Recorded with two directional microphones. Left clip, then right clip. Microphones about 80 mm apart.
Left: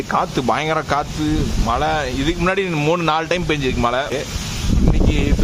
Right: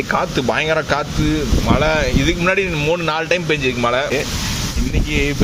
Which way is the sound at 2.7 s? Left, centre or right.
Left.